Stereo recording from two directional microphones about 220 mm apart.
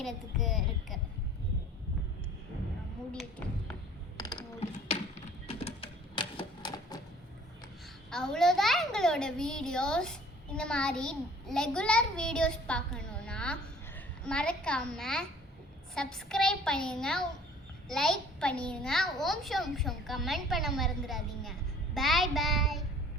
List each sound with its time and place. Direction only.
0.0 s a child's voice: centre (ahead or behind)
3.1 s a child's voice: 5° left (ahead or behind)
4.2 s a sound: 15° left (ahead or behind)
4.9 s typewriter: 30° left (ahead or behind)
8.1 s a child's voice: centre (ahead or behind)